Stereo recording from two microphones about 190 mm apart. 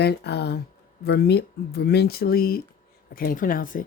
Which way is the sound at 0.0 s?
60° left (ahead or behind).